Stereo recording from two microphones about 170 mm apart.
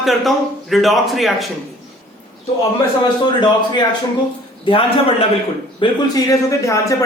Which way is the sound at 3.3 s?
25° left (ahead or behind).